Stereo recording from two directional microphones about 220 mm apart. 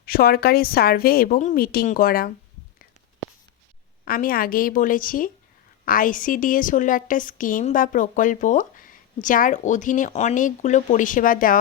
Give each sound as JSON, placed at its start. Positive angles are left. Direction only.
{"t": 0.0, "sound": "a woman's voice", "side_deg": 45}
{"t": 4.0, "sound": "a woman's voice", "side_deg": 40}